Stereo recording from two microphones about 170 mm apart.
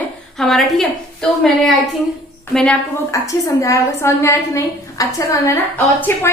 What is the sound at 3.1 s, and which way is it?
A woman's voice, 20° left (ahead or behind).